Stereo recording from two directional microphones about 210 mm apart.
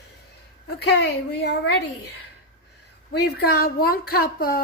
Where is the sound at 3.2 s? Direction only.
50° left (ahead or behind).